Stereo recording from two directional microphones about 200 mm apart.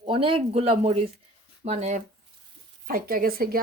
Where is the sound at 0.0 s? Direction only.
25° right (ahead or behind).